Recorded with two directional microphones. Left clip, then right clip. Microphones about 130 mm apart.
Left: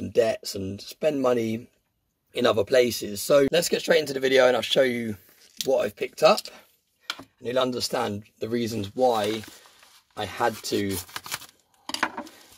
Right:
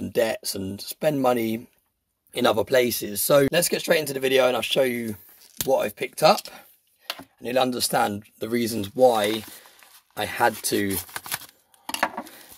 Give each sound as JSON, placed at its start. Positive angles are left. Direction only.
{"t": 0.0, "sound": "speech", "side_deg": -30}
{"t": 4.3, "sound": "speech", "side_deg": 0}
{"t": 5.7, "sound": "speech", "side_deg": -25}
{"t": 7.1, "sound": "speech", "side_deg": -55}